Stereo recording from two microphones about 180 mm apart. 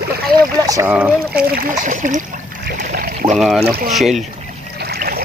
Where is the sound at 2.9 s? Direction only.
55° right (ahead or behind).